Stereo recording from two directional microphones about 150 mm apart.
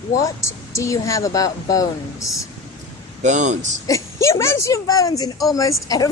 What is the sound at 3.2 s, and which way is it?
Speech, 55° right (ahead or behind).